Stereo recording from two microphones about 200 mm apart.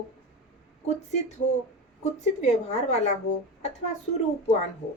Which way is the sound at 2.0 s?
35° left (ahead or behind).